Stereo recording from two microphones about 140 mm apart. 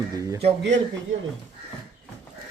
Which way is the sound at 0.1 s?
25° right (ahead or behind).